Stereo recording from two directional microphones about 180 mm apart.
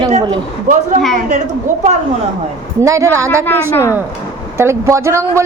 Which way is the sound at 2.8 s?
15° right (ahead or behind).